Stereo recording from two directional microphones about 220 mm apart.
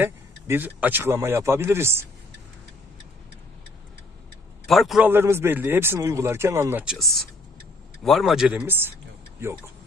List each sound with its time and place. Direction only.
0.0 s a man's voice: 10° right (ahead or behind)
4.6 s a man's voice: centre (ahead or behind)